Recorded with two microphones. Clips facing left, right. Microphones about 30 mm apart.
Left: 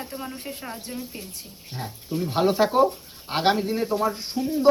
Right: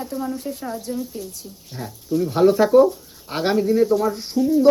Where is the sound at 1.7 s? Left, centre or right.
Left.